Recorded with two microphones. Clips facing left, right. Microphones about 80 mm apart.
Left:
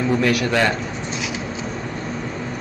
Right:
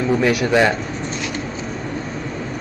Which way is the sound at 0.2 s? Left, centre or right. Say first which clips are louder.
Right 2 dB; centre.